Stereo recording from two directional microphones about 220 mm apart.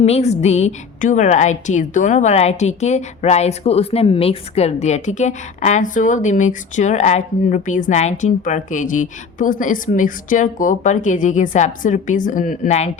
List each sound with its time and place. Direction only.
0.0 s a woman's voice: 30° left (ahead or behind)